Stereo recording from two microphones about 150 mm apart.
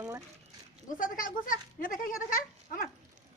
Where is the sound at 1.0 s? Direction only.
65° left (ahead or behind).